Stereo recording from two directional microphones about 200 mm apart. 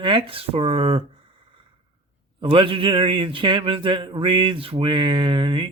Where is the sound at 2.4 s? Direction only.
25° right (ahead or behind).